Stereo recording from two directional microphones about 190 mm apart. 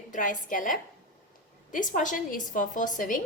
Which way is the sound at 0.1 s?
45° left (ahead or behind).